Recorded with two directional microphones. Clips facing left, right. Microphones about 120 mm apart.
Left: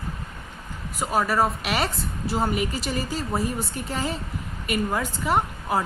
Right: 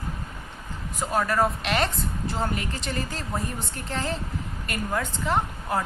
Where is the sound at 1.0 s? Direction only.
5° left (ahead or behind).